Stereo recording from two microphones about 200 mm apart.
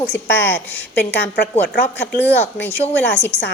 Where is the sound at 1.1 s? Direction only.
55° left (ahead or behind).